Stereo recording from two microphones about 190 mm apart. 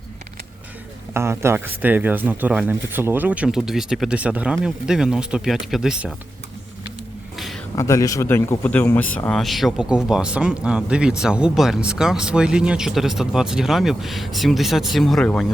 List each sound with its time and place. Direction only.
1.1 s speech: 15° right (ahead or behind)
7.3 s a sound: centre (ahead or behind)
7.8 s speech: 15° left (ahead or behind)